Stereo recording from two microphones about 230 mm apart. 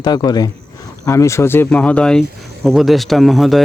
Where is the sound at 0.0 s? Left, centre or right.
Centre.